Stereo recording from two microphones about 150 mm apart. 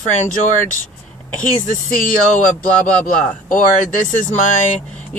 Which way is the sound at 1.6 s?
65° left (ahead or behind).